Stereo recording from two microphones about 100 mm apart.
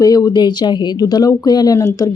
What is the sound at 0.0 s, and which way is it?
Speech, 35° left (ahead or behind).